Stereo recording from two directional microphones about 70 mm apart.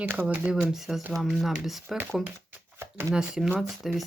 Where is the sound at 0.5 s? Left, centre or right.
Centre.